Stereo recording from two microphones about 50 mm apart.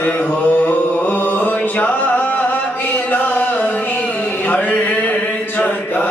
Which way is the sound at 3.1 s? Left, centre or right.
Left.